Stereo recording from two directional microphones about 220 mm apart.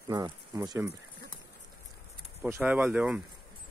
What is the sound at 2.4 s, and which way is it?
Speech, 5° right (ahead or behind).